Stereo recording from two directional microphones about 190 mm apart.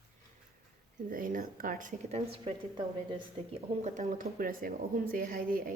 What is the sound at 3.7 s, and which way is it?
A woman's voice, 40° right (ahead or behind).